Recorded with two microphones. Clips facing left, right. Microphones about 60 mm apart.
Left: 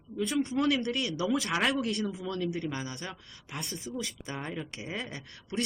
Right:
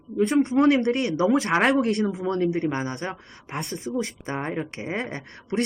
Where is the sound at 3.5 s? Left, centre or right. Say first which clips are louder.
Right 8 dB; right.